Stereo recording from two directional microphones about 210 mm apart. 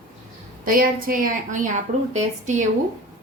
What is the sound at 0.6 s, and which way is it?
A woman's voice, 40° right (ahead or behind).